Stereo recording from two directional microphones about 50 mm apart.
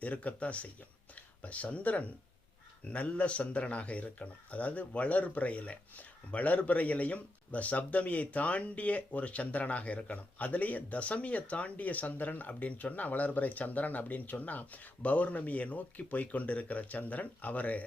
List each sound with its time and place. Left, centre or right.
0.0 s speech: left